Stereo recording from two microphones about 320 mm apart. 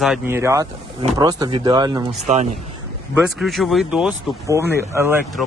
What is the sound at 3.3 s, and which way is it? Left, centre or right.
Speech, centre.